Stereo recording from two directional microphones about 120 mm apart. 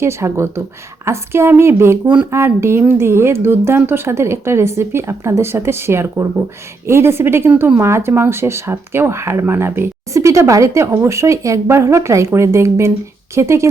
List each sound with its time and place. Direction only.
0.0 s speech: 20° right (ahead or behind)